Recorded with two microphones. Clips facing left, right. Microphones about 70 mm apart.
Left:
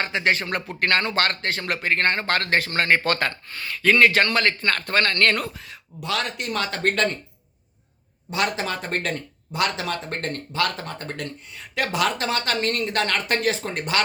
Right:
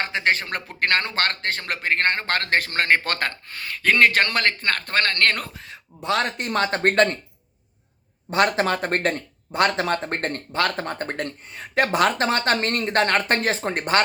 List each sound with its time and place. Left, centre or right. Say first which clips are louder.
0.0 s speech: even; right
5.4 s speech: left 3 dB; right
8.3 s speech: right 5 dB; right